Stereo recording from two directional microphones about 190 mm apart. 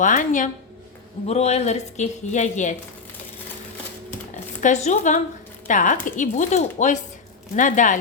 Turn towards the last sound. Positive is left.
turn(degrees=40)  # may be behind; listen again after turning